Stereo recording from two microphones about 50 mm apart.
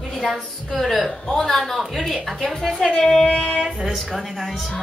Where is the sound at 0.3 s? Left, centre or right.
Centre.